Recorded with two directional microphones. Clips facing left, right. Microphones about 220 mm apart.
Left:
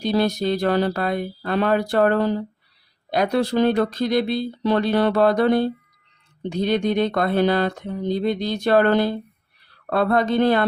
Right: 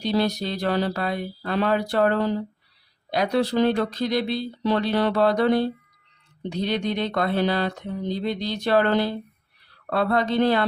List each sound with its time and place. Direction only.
0.0 s speech: 50° left (ahead or behind)